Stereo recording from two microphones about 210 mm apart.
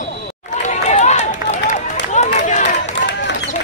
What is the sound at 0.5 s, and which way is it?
Run, 35° left (ahead or behind).